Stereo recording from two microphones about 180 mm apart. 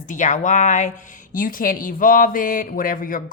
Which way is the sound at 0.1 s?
45° left (ahead or behind).